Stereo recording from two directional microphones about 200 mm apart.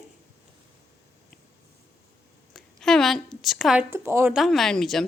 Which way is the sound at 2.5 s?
Centre (ahead or behind).